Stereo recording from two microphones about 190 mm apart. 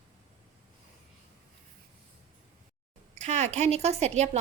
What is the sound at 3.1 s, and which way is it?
A woman's voice, 35° right (ahead or behind).